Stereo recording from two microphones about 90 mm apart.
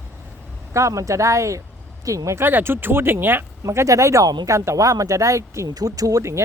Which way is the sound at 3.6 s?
35° right (ahead or behind).